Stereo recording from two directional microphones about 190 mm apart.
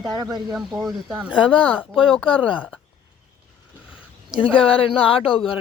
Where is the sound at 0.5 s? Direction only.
Centre (ahead or behind).